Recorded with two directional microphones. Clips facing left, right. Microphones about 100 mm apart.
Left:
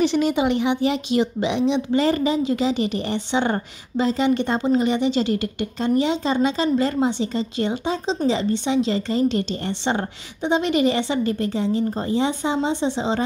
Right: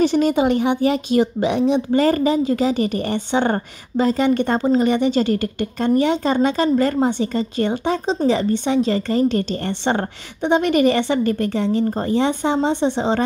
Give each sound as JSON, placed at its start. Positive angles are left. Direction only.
{"t": 0.0, "sound": "a woman's voice", "side_deg": -45}